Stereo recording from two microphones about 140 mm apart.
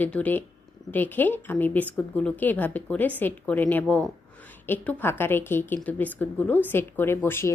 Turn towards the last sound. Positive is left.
turn(degrees=15)  # may be behind; listen again after turning